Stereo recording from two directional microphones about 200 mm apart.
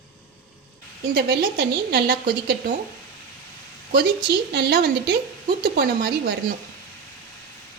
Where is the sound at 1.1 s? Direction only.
50° right (ahead or behind).